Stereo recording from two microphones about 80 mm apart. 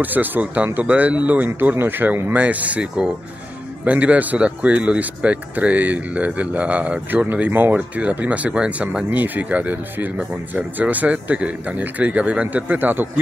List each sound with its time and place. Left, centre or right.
0.0 s speech: right